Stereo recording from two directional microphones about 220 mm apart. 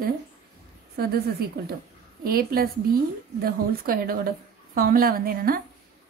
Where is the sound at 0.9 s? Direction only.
45° right (ahead or behind).